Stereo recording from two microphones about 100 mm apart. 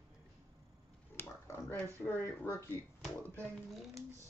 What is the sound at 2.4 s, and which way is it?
Speech, 25° left (ahead or behind).